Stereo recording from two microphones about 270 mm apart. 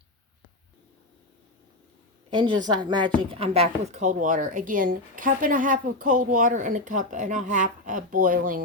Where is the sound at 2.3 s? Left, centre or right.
Centre.